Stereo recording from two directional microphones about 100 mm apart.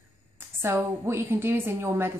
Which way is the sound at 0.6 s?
25° right (ahead or behind).